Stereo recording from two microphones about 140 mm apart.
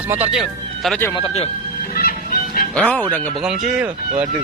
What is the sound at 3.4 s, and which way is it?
Speech, 5° right (ahead or behind).